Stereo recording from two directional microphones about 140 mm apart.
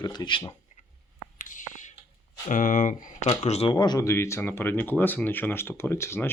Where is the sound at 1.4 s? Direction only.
70° left (ahead or behind).